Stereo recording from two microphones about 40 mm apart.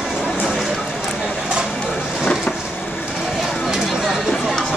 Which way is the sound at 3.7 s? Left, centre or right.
Centre.